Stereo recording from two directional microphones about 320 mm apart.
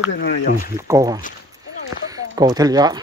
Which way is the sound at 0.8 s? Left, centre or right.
Centre.